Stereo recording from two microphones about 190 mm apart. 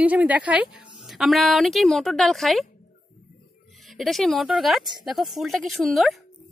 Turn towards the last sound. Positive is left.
turn(degrees=0)  # may be behind; listen again after turning